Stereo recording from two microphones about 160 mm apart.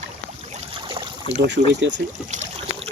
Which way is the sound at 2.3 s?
40° right (ahead or behind).